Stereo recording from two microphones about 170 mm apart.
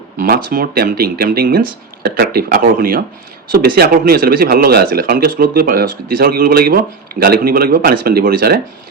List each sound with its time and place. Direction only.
0.2 s speech: 55° right (ahead or behind)